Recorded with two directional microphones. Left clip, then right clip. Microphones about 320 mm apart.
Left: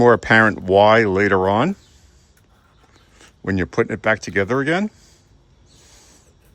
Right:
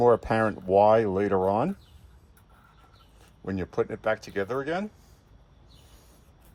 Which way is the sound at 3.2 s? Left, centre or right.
Left.